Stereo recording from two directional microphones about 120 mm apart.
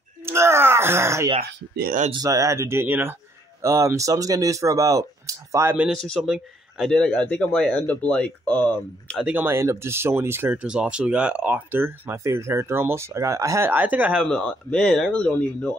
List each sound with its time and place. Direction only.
0.2 s a sound: 20° right (ahead or behind)
2.1 s speech: 30° right (ahead or behind)
5.9 s speech: 5° left (ahead or behind)
9.2 s speech: 15° right (ahead or behind)
14.2 s speech: 5° left (ahead or behind)